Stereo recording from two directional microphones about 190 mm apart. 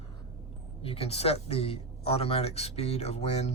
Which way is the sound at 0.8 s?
30° left (ahead or behind).